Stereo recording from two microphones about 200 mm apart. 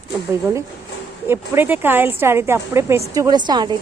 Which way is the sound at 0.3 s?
10° right (ahead or behind).